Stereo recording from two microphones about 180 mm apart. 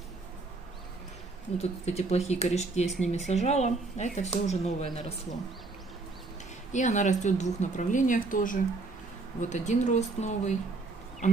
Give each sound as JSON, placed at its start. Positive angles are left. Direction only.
{"t": 1.6, "sound": "speech", "side_deg": 35}
{"t": 6.7, "sound": "a woman's voice", "side_deg": 45}